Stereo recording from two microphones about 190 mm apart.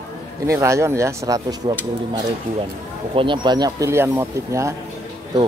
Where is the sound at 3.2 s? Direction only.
25° right (ahead or behind).